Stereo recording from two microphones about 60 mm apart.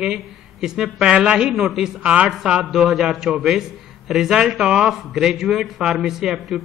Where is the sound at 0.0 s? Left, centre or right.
Centre.